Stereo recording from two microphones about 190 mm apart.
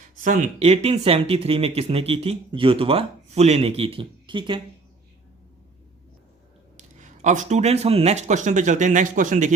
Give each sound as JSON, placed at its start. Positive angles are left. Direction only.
{"t": 0.2, "sound": "speech", "side_deg": -40}
{"t": 6.7, "sound": "speech", "side_deg": -40}